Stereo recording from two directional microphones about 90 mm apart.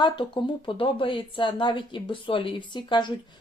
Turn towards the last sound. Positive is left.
turn(degrees=60)  # may be behind; listen again after turning